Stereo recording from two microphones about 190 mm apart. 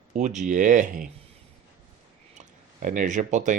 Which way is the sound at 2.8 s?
40° right (ahead or behind).